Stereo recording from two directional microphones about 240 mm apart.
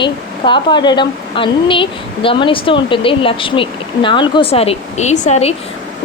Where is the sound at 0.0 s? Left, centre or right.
Centre.